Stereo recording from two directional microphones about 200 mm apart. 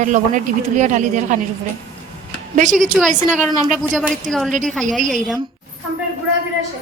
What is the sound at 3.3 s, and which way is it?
A woman's voice, 5° right (ahead or behind).